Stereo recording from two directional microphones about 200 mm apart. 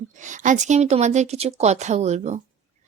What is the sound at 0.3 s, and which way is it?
A woman's voice, 35° right (ahead or behind).